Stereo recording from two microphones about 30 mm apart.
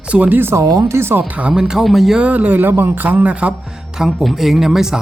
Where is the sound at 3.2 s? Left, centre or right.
Right.